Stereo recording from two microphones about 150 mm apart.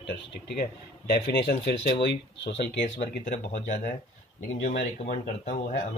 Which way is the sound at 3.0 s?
50° left (ahead or behind).